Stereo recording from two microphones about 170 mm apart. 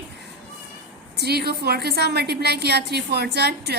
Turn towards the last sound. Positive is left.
turn(degrees=-75)  # may be behind; listen again after turning